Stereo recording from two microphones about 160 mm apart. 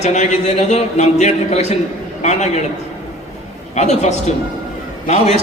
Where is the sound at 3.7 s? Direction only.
45° left (ahead or behind).